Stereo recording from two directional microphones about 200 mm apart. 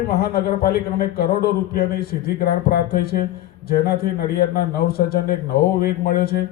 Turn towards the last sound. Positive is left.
turn(degrees=50)  # may be behind; listen again after turning